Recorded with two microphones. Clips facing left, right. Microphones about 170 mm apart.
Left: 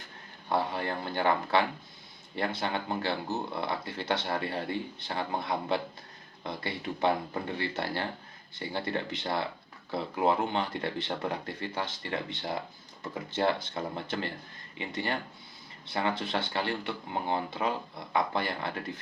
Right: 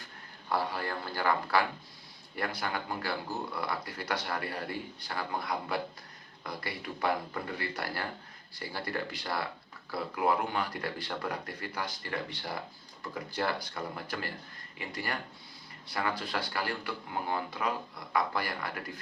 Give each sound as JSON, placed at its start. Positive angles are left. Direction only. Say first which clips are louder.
{"t": 0.5, "sound": "speech", "louder": "left 3 dB", "side_deg": 25}